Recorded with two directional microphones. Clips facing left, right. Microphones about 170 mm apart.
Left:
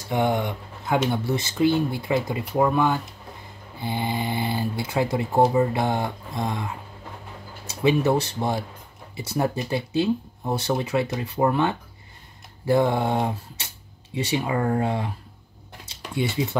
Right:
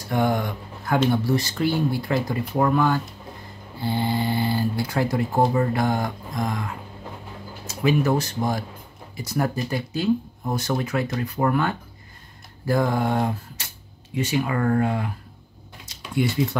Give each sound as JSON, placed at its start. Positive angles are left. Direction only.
{"t": 0.1, "sound": "speech", "side_deg": 20}
{"t": 7.8, "sound": "speech", "side_deg": 25}